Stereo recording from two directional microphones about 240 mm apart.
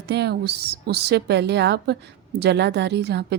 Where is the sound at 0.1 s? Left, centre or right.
Right.